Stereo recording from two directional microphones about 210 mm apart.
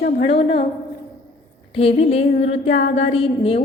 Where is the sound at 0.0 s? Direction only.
55° left (ahead or behind).